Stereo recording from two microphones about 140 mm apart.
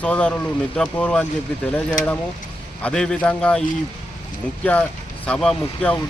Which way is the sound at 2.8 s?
5° left (ahead or behind).